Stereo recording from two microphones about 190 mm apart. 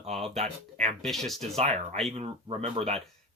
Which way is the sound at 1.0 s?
Centre (ahead or behind).